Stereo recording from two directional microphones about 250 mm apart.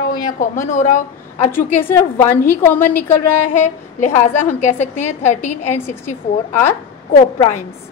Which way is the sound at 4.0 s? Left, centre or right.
Left.